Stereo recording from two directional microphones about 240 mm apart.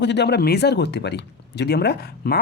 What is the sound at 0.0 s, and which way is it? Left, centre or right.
Speech, left.